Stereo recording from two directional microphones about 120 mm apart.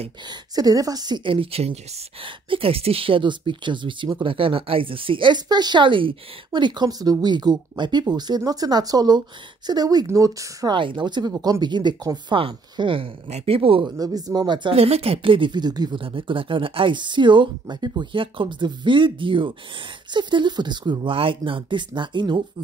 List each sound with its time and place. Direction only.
0.3 s speech: 30° right (ahead or behind)
10.7 s speech: 40° right (ahead or behind)
12.4 s speech: 45° right (ahead or behind)
13.8 s speech: 30° right (ahead or behind)
14.8 s speech: 55° right (ahead or behind); by 22.4 s 40° right (ahead or behind)